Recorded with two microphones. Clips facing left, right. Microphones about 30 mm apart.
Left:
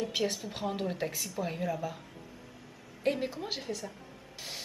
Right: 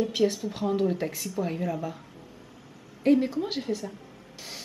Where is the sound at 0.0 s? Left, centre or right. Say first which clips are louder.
Right 7 dB; centre.